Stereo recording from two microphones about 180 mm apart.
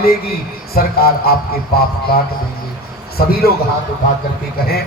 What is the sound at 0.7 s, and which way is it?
Speech, 55° left (ahead or behind).